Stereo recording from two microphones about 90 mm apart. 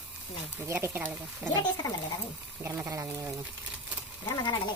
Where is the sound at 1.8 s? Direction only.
40° left (ahead or behind).